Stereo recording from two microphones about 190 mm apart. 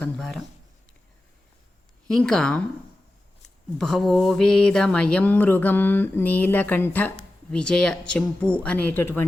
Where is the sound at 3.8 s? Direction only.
Centre (ahead or behind).